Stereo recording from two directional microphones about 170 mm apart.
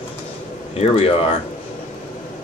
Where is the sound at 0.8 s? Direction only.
35° left (ahead or behind).